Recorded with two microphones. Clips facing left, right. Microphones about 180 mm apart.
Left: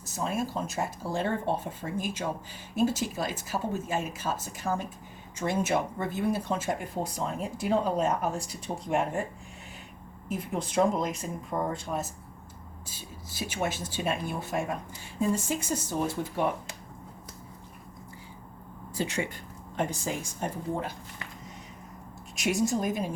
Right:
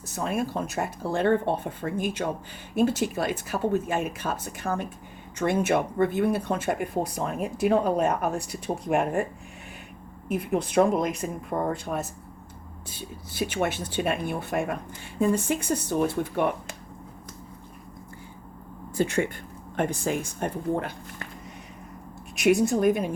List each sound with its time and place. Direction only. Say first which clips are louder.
0.0 s speech: right 3 dB; 60° right (ahead or behind)
10.2 s speech: right 6 dB; 60° right (ahead or behind)
18.9 s speech: right 6 dB; 55° right (ahead or behind)
22.4 s speech: right 6 dB; 60° right (ahead or behind)